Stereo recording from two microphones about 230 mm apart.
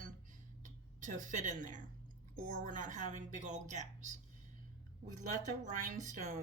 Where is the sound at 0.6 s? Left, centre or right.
Right.